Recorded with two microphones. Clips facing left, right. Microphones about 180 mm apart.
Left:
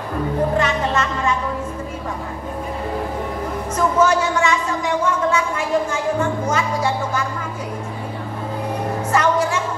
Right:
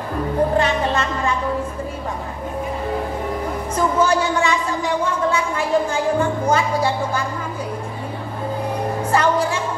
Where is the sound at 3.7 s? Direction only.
30° right (ahead or behind).